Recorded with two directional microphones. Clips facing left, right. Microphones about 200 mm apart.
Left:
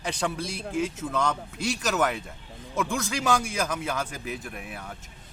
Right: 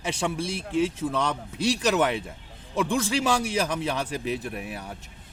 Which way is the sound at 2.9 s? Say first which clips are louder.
Right 2 dB; 30° right (ahead or behind).